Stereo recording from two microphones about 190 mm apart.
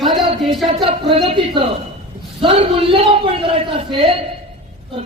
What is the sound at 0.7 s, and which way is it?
A man's voice, 30° right (ahead or behind).